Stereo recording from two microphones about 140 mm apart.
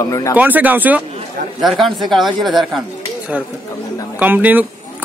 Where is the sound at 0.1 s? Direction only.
20° left (ahead or behind).